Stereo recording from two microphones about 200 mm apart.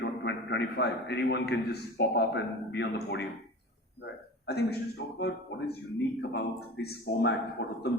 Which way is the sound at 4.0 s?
55° left (ahead or behind).